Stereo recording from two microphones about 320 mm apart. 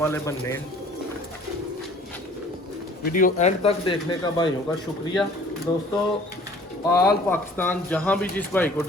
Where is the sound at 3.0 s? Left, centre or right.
Left.